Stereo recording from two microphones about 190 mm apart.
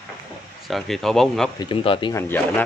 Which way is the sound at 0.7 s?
Centre (ahead or behind).